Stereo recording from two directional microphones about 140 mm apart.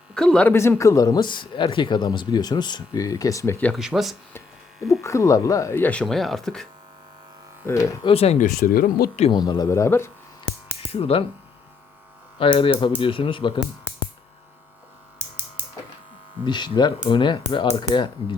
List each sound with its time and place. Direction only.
0.1 s speech: 5° left (ahead or behind)
0.5 s speech: 20° left (ahead or behind)
3.8 s speech: 5° right (ahead or behind)
5.0 s speech: 20° left (ahead or behind); by 6.7 s centre (ahead or behind)
7.7 s speech: 20° left (ahead or behind)
8.0 s speech: 45° left (ahead or behind)
8.4 s speech: 90° left
9.3 s speech: 30° left (ahead or behind)
10.8 s speech: 45° left (ahead or behind)
12.4 s speech: 40° left (ahead or behind)
16.4 s speech: 30° left (ahead or behind)